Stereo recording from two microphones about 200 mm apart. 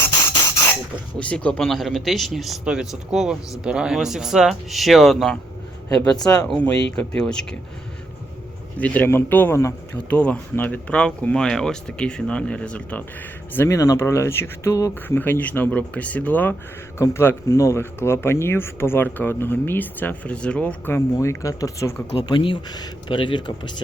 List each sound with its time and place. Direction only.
1.2 s speech: 5° left (ahead or behind)
6.5 s speech: 5° left (ahead or behind)
8.8 s speech: 10° left (ahead or behind); by 23.7 s 25° left (ahead or behind)